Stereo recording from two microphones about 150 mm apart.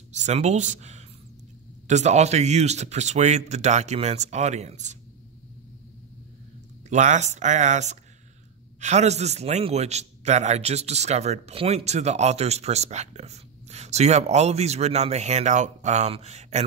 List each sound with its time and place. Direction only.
0.1 s a man's voice: 50° right (ahead or behind)
6.9 s a man's voice: 50° right (ahead or behind)